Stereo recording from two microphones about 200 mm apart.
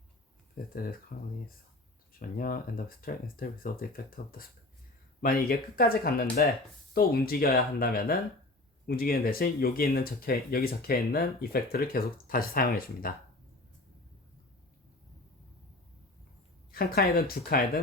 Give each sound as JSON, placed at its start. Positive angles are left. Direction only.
{"t": 0.5, "sound": "speech", "side_deg": 45}
{"t": 2.1, "sound": "speech", "side_deg": 45}
{"t": 16.7, "sound": "speech", "side_deg": 50}